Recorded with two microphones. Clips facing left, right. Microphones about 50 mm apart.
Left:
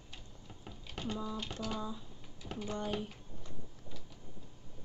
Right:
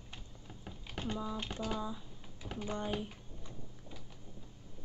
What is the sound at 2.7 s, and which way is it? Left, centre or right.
Speech, right.